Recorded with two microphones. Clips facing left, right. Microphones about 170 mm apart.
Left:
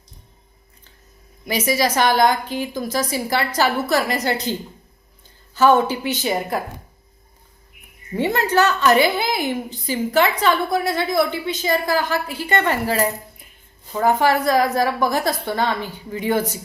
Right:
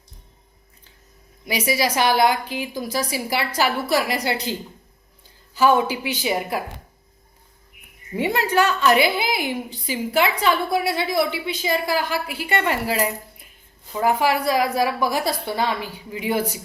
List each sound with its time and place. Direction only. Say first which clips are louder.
1.5 s a woman's voice: left 2 dB; 10° right (ahead or behind)
5.5 s a woman's voice: left 2 dB; 10° right (ahead or behind)
8.1 s a woman's voice: left 2 dB; 10° right (ahead or behind)
11.3 s a woman's voice: left 2 dB; 45° left (ahead or behind)
11.6 s a woman's voice: left 2 dB; 10° right (ahead or behind)